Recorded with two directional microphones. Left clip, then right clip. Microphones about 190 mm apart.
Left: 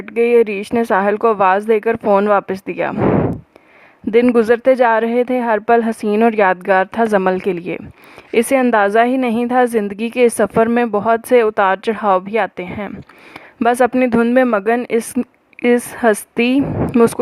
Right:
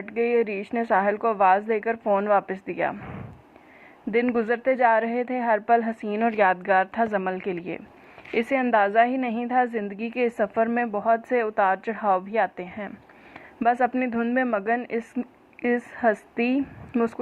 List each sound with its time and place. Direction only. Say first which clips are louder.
0.1 s a woman's voice: left 10 dB; 65° left (ahead or behind)
0.9 s a woman's voice: left 7 dB; 50° left (ahead or behind)
4.2 s a woman's voice: left 12 dB; 55° left (ahead or behind)
6.1 s a woman's voice: left 8 dB; 65° left (ahead or behind); by 12.9 s 50° left (ahead or behind)
13.6 s a woman's voice: left 9 dB; 65° left (ahead or behind)